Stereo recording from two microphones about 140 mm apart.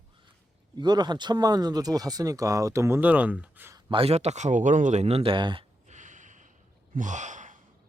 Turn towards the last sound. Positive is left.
turn(degrees=-60)  # may be behind; listen again after turning